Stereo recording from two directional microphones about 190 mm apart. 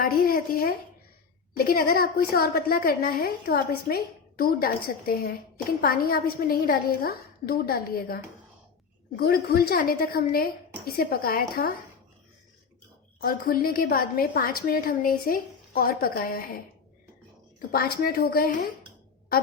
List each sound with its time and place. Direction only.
0.0 s a woman's voice: 50° left (ahead or behind)
13.1 s a woman's voice: 50° left (ahead or behind)
17.7 s a woman's voice: 50° left (ahead or behind)